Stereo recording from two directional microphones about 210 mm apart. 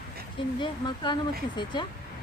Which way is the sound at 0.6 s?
20° left (ahead or behind).